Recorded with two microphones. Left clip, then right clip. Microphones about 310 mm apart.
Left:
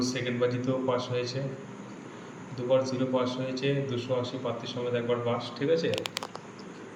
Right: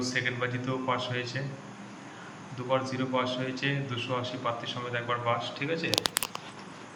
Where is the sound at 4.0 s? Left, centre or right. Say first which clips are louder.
Left 2 dB; right.